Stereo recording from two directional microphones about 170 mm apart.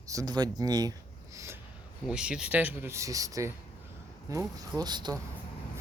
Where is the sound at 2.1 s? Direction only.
5° right (ahead or behind); by 5.1 s 25° right (ahead or behind).